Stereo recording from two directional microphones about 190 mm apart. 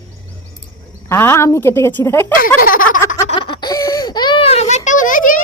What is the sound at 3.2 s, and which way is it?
Baby laughter, 25° left (ahead or behind).